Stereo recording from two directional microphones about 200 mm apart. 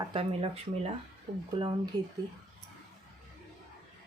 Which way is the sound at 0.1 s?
25° right (ahead or behind).